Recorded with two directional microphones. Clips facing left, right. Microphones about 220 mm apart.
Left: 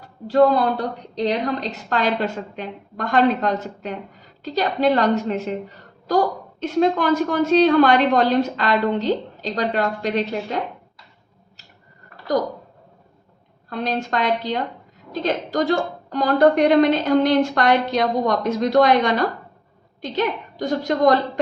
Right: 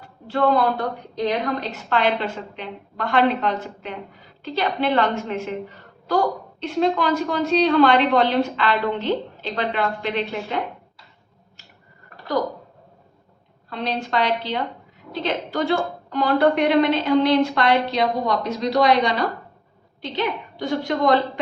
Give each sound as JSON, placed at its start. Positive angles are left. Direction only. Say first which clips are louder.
{"t": 0.0, "sound": "a woman's voice", "louder": "left 5 dB", "side_deg": 40}
{"t": 13.7, "sound": "a woman's voice", "louder": "left 2 dB", "side_deg": 45}